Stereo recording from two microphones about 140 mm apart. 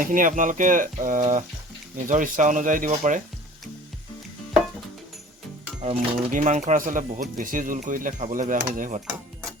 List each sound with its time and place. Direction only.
0.0 s speech: 70° right (ahead or behind)
5.8 s speech: 60° right (ahead or behind)